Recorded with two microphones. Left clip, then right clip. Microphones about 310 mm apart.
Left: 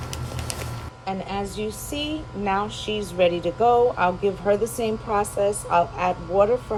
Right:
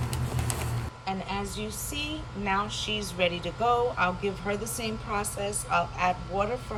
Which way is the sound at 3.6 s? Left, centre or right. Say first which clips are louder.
Left 7 dB; right.